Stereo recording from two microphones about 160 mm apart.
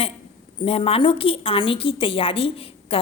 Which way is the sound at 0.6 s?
35° left (ahead or behind).